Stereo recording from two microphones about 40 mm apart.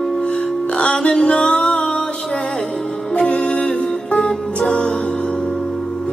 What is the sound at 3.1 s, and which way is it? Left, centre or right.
Music, left.